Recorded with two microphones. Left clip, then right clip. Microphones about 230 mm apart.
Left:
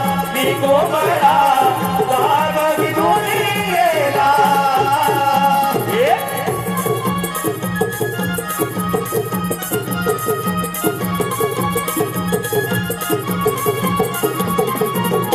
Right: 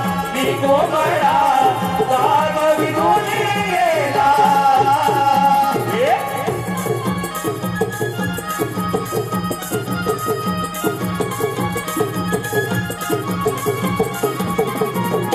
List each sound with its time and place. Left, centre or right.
0.0 s music: left
13.1 s music: left